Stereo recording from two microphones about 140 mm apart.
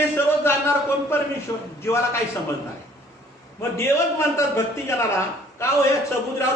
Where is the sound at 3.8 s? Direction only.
20° left (ahead or behind).